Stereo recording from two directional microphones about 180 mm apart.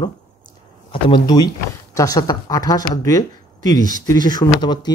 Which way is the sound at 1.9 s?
20° left (ahead or behind).